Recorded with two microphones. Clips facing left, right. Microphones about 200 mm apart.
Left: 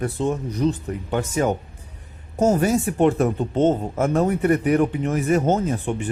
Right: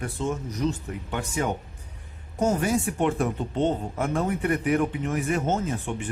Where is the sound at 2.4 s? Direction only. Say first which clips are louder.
Left 5 dB; 40° left (ahead or behind).